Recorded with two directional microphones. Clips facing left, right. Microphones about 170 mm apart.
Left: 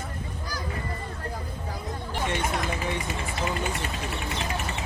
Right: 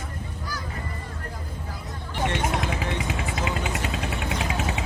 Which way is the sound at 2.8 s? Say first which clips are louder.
Right 2 dB; 90° right.